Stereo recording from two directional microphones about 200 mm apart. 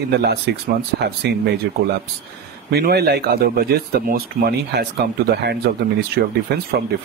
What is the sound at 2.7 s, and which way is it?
Speech, 55° right (ahead or behind).